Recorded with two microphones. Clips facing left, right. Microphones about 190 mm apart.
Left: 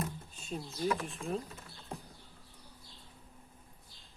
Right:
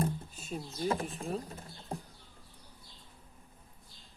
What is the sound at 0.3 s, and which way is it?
Bird, 5° right (ahead or behind).